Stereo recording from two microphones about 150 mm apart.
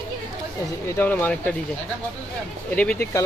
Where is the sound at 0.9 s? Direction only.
15° left (ahead or behind).